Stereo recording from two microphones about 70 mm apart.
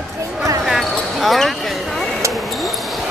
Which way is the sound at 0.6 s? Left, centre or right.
Centre.